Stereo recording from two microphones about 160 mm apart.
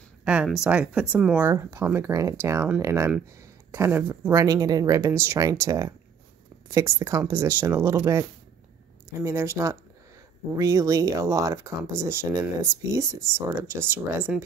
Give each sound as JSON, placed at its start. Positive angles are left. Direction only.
{"t": 0.2, "sound": "speech", "side_deg": -5}